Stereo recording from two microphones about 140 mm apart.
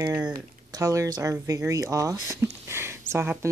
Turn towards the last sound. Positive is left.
turn(degrees=-15)  # may be behind; listen again after turning